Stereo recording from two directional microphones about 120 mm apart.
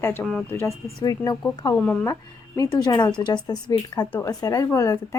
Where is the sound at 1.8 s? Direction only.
15° left (ahead or behind).